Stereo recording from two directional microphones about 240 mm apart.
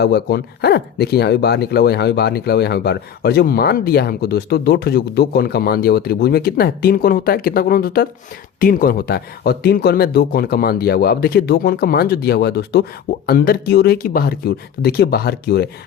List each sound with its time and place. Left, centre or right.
0.0 s speech: left